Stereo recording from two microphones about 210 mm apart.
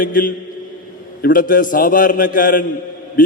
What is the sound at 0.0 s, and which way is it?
A man's voice, 40° left (ahead or behind).